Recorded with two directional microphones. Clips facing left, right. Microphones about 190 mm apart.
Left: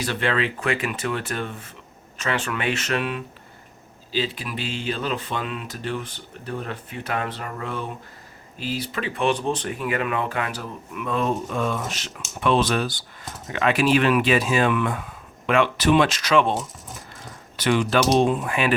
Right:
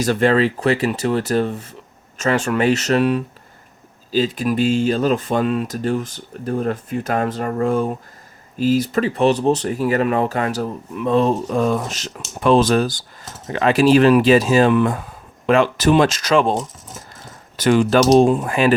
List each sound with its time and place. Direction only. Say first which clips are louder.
0.0 s speech: right 8 dB; 40° right (ahead or behind)